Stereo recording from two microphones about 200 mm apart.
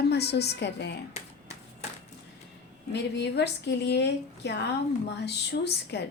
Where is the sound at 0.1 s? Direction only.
55° left (ahead or behind).